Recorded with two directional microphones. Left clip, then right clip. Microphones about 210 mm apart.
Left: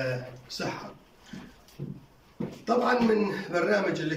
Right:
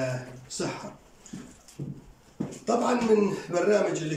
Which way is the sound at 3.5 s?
15° right (ahead or behind).